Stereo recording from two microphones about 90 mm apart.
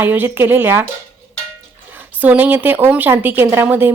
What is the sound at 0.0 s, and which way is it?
Speech, 20° right (ahead or behind).